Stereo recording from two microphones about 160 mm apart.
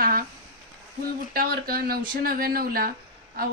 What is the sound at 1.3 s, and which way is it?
A woman's voice, 65° right (ahead or behind).